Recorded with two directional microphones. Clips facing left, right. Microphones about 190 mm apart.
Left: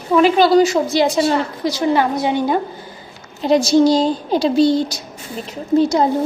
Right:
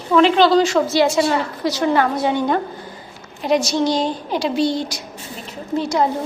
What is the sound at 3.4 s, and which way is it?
A woman's voice, 30° left (ahead or behind).